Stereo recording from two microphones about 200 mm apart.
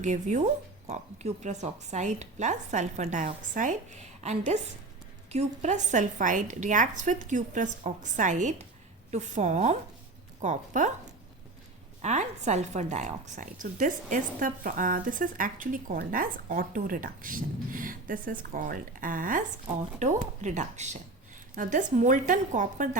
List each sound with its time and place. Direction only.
0.0 s speech: 35° right (ahead or behind)
12.0 s a woman's voice: 35° right (ahead or behind)